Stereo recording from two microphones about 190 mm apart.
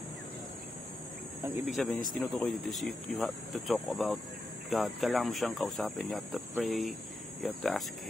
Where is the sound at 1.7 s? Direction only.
Centre (ahead or behind).